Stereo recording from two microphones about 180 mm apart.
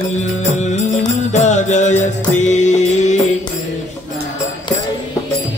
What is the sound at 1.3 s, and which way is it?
Music, 40° left (ahead or behind).